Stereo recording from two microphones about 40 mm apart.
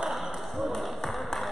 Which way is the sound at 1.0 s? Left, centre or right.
Centre.